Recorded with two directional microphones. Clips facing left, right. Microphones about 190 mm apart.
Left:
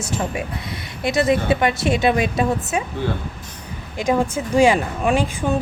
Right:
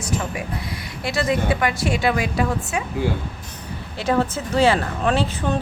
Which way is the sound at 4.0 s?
15° left (ahead or behind).